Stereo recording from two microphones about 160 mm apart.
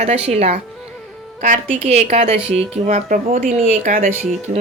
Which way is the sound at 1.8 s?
45° right (ahead or behind).